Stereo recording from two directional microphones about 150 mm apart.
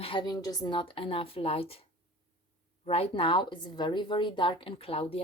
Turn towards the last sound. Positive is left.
turn(degrees=40)  # may be behind; listen again after turning